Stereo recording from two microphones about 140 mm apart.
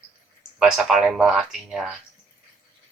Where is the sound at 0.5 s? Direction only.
5° right (ahead or behind).